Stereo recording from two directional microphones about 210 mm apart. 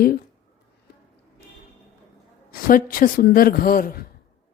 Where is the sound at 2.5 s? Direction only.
40° left (ahead or behind).